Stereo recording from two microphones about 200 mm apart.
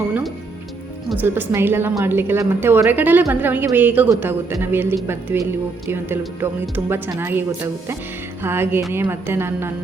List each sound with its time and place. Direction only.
1.2 s a woman's voice: 10° right (ahead or behind)